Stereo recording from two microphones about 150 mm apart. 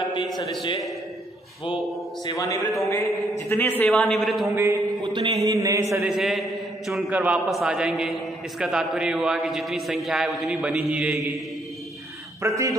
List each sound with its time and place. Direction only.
2.2 s a man's voice: 20° left (ahead or behind); by 4.5 s centre (ahead or behind)
4.5 s a man's voice: 20° right (ahead or behind)
5.0 s a man's voice: 30° right (ahead or behind)
6.0 s a man's voice: centre (ahead or behind)
12.4 s a man's voice: 20° right (ahead or behind)